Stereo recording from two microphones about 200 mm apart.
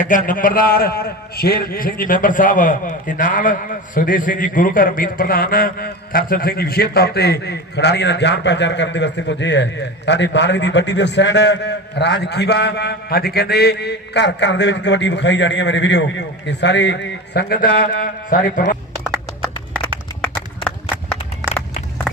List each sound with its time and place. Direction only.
0.0 s a man's voice: 40° left (ahead or behind)